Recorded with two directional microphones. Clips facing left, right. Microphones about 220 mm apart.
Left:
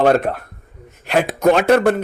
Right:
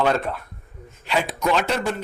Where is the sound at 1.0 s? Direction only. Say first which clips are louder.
Left 8 dB; 50° left (ahead or behind).